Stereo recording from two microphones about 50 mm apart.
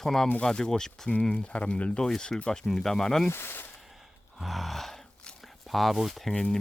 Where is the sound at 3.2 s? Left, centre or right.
Left.